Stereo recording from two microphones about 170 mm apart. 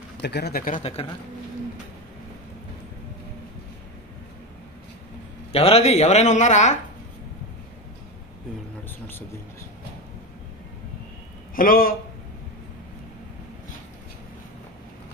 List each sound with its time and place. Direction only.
0.2 s speech: 75° left (ahead or behind); by 0.8 s 55° left (ahead or behind)
5.5 s speech: 35° left (ahead or behind)
8.8 s speech: 10° left (ahead or behind)
11.5 s speech: 55° left (ahead or behind)